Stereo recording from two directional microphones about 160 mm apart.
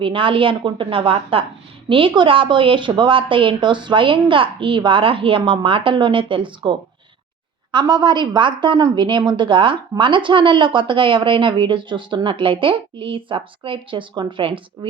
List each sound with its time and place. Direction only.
0.0 s a woman's voice: 30° right (ahead or behind)